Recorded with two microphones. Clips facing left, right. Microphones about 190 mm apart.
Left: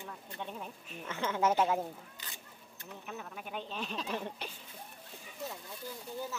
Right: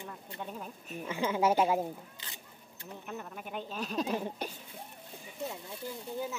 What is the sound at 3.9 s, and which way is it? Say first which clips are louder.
Speech: right 7 dB; 40° right (ahead or behind).